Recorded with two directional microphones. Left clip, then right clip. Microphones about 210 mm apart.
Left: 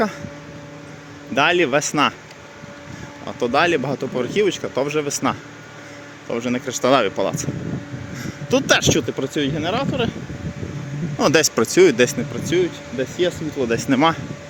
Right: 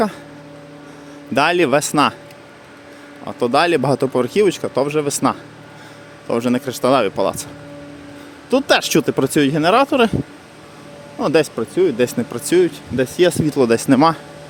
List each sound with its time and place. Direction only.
1.4 s speech: 25° right (ahead or behind)
3.2 s speech: 20° right (ahead or behind)
6.2 s speech: 25° right (ahead or behind)
8.4 s speech: 15° right (ahead or behind)
9.0 s speech: 35° right (ahead or behind)
11.2 s speech: 5° right (ahead or behind)
11.5 s speech: 5° left (ahead or behind)
12.3 s speech: 35° right (ahead or behind)
13.7 s speech: 25° right (ahead or behind)